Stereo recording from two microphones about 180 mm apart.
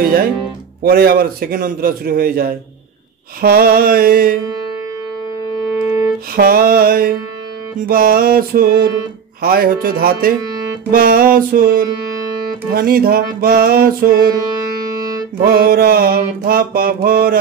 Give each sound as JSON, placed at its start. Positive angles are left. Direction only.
{"t": 0.0, "sound": "mantra", "side_deg": -55}
{"t": 5.7, "sound": "music", "side_deg": -15}
{"t": 6.3, "sound": "mantra", "side_deg": -55}
{"t": 10.4, "sound": "music", "side_deg": -20}
{"t": 10.9, "sound": "mantra", "side_deg": -55}
{"t": 14.8, "sound": "music", "side_deg": -20}
{"t": 15.4, "sound": "mantra", "side_deg": -55}